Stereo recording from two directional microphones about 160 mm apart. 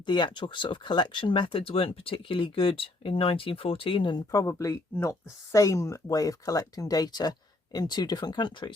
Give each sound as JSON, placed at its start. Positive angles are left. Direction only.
{"t": 0.0, "sound": "speech", "side_deg": 30}
{"t": 4.3, "sound": "speech", "side_deg": 20}